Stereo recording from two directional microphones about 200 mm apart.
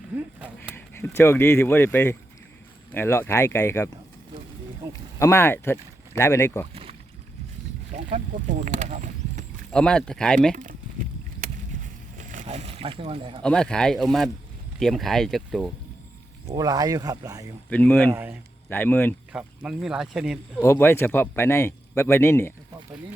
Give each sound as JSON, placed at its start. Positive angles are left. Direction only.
{"t": 0.3, "sound": "a sound", "side_deg": -5}
{"t": 0.8, "sound": "speech", "side_deg": 10}
{"t": 5.2, "sound": "speech", "side_deg": 10}
{"t": 7.9, "sound": "speech", "side_deg": -35}
{"t": 9.7, "sound": "speech", "side_deg": 5}
{"t": 10.5, "sound": "speech", "side_deg": -40}
{"t": 11.3, "sound": "a sound", "side_deg": -40}
{"t": 13.4, "sound": "speech", "side_deg": 5}
{"t": 16.6, "sound": "speech", "side_deg": -20}
{"t": 17.7, "sound": "speech", "side_deg": 5}
{"t": 18.1, "sound": "speech", "side_deg": -10}
{"t": 18.7, "sound": "speech", "side_deg": 10}
{"t": 19.3, "sound": "speech", "side_deg": -5}
{"t": 20.6, "sound": "speech", "side_deg": 10}